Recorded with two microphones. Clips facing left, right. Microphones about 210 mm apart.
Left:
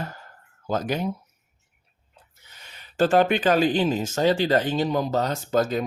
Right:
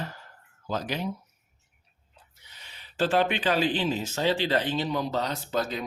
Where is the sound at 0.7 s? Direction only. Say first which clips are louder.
Left 5 dB; 45° left (ahead or behind).